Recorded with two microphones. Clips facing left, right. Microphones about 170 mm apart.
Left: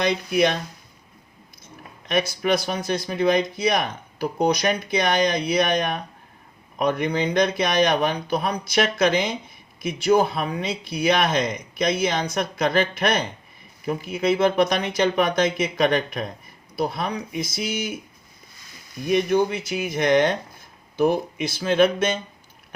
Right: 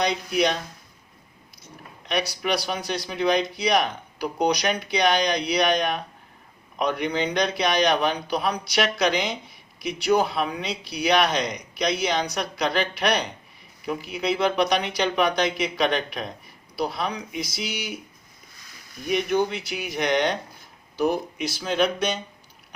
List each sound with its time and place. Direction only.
0.0 s speech: 55° left (ahead or behind)
2.0 s speech: 50° left (ahead or behind)
6.7 s speech: 50° left (ahead or behind)
19.3 s speech: 45° left (ahead or behind)